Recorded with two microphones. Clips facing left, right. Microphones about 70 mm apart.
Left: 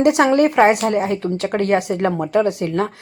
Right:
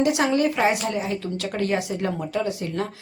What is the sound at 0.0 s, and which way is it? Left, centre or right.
Speech, left.